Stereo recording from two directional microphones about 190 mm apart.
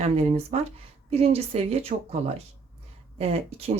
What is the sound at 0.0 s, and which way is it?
Speech, 35° right (ahead or behind).